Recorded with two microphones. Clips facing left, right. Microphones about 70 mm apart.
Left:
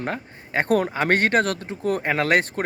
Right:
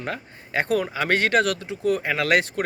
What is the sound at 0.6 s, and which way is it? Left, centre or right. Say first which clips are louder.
Speech: left 3 dB; left.